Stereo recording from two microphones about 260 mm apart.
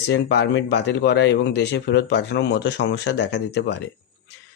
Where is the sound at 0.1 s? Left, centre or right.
Left.